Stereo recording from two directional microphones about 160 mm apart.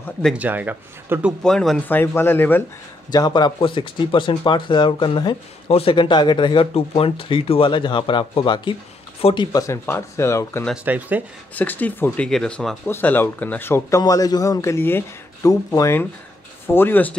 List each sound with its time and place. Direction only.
0.2 s speech: 5° right (ahead or behind)
1.4 s speech: 5° left (ahead or behind)
3.1 s speech: 25° left (ahead or behind)
10.9 s speech: 10° right (ahead or behind)
11.5 s speech: 10° left (ahead or behind)